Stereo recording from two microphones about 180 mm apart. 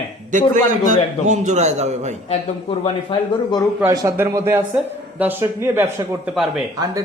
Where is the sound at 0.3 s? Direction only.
45° right (ahead or behind).